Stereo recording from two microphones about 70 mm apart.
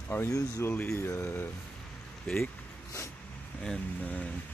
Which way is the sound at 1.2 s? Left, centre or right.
Left.